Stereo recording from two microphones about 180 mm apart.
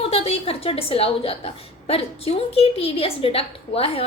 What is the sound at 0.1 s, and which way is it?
A woman's voice, 35° left (ahead or behind).